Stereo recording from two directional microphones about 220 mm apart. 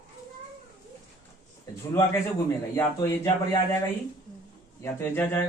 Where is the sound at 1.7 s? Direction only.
15° left (ahead or behind).